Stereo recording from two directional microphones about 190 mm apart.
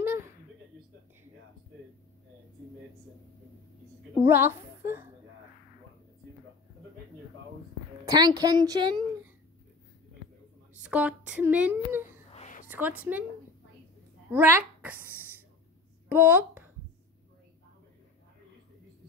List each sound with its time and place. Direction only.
4.2 s a sound: 10° right (ahead or behind)
8.0 s a sound: 20° right (ahead or behind)
8.4 s speech: 20° right (ahead or behind)
10.8 s speech: 5° right (ahead or behind)
12.3 s whispering: 35° left (ahead or behind)
12.6 s a woman's voice: 10° right (ahead or behind)
14.3 s speech: 10° right (ahead or behind)
16.1 s speech: 10° right (ahead or behind)